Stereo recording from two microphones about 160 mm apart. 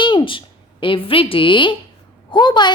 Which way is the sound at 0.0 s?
30° left (ahead or behind).